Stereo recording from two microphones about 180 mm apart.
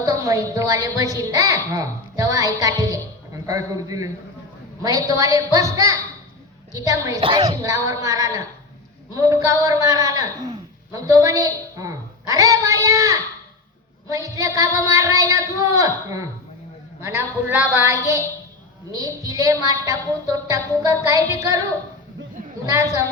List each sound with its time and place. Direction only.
0.0 s a woman's voice: 20° right (ahead or behind)
22.6 s a woman's voice: 20° right (ahead or behind)